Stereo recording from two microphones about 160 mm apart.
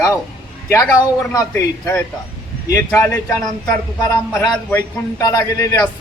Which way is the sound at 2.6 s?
20° left (ahead or behind).